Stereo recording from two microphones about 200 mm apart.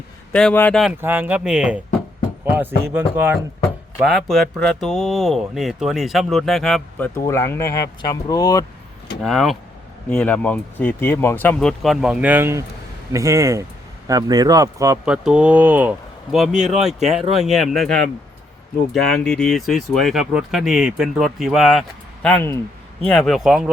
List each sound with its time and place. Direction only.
0.3 s speech: 5° left (ahead or behind)
1.0 s speech: 10° right (ahead or behind)
7.2 s speech: 15° left (ahead or behind)
9.2 s speech: centre (ahead or behind); by 14.9 s 15° right (ahead or behind)
15.0 s speech: 5° right (ahead or behind)
19.0 s speech: 5° left (ahead or behind)